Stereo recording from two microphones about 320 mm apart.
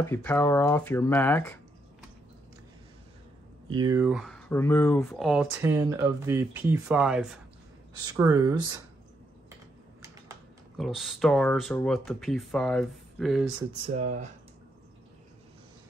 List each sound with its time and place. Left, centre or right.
0.0 s speech: centre
3.7 s speech: centre
10.8 s speech: centre
13.6 s speech: centre